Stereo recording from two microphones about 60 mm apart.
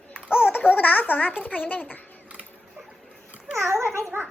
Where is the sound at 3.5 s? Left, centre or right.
Right.